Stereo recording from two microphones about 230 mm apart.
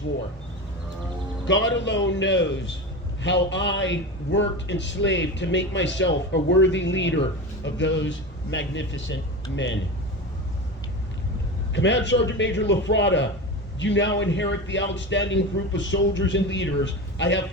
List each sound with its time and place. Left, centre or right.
1.5 s a man's voice: left
11.7 s a man's voice: left